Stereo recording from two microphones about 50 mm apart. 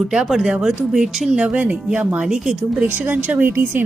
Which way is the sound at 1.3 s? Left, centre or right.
Right.